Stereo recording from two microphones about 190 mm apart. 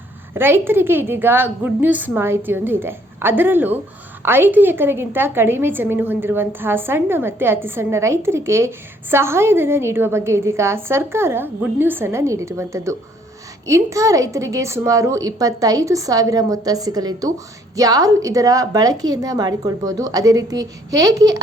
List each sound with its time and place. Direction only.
0.3 s a woman's voice: 10° right (ahead or behind)